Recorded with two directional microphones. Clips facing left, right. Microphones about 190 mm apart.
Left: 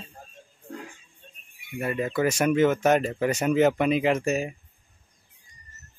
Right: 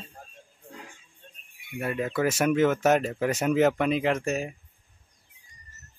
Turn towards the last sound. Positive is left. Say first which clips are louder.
# left 3 dB
turn(degrees=5)  # may be behind; listen again after turning